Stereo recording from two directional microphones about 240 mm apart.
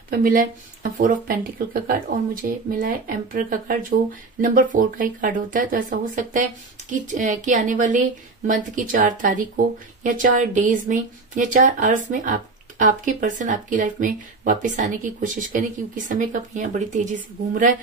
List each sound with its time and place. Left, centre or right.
0.1 s speech: right